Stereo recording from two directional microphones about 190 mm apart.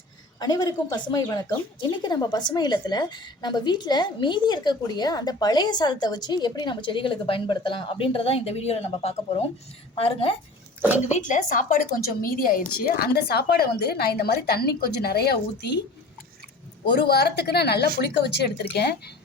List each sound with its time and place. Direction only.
0.3 s a woman's voice: 20° left (ahead or behind)
11.1 s a woman's voice: 40° left (ahead or behind); by 15.8 s 60° left (ahead or behind)
16.9 s a woman's voice: 60° left (ahead or behind)